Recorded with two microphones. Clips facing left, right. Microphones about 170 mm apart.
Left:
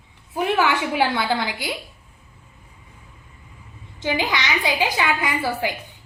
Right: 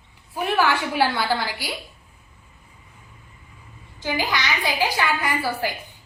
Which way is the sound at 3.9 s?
20° left (ahead or behind).